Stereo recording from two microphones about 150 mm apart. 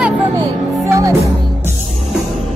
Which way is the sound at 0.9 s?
20° right (ahead or behind).